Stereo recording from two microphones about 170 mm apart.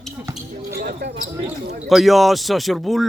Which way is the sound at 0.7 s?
65° right (ahead or behind).